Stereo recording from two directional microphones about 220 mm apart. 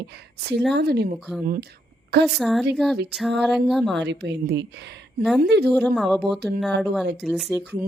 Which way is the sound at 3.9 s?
50° right (ahead or behind).